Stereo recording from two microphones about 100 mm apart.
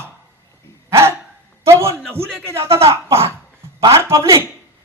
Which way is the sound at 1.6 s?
25° right (ahead or behind).